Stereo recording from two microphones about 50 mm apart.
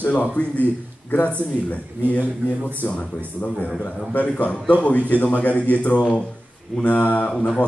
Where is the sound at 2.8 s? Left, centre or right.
Left.